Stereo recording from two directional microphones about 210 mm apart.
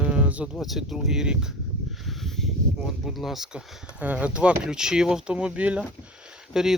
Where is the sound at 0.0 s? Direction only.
5° right (ahead or behind).